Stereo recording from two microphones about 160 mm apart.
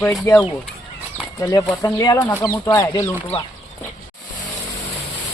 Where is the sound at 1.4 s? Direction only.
20° left (ahead or behind).